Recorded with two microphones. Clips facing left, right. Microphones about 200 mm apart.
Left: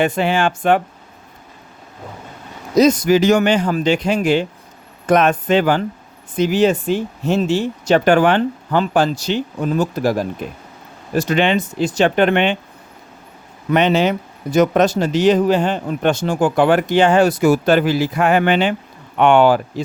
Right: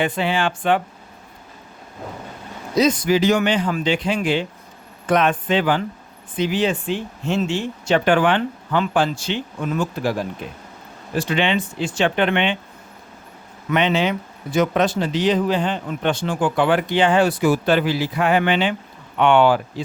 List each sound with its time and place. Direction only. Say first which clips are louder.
0.0 s speech: left 4 dB; 45° left (ahead or behind)
2.7 s speech: left 5 dB; 40° left (ahead or behind)
13.7 s speech: left 4 dB; 40° left (ahead or behind)